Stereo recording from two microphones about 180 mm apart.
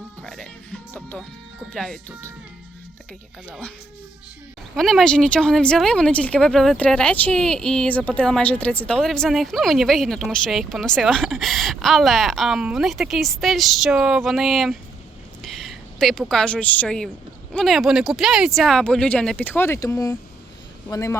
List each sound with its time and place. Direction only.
0.2 s music: 5° left (ahead or behind)
1.7 s speech: centre (ahead or behind)
4.7 s a woman's voice: centre (ahead or behind)